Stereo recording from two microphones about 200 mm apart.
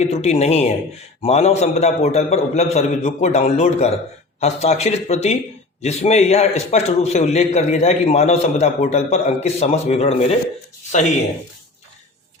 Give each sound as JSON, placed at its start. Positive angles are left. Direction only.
{"t": 0.0, "sound": "a man's voice", "side_deg": 35}